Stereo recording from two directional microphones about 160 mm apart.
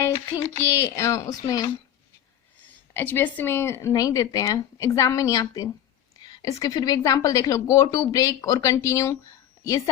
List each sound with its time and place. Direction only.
0.0 s speech: 15° left (ahead or behind)
2.9 s a woman's voice: 10° left (ahead or behind)